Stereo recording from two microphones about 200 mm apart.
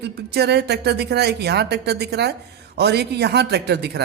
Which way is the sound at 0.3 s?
55° right (ahead or behind).